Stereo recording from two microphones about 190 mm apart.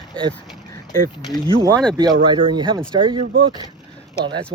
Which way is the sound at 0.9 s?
20° left (ahead or behind).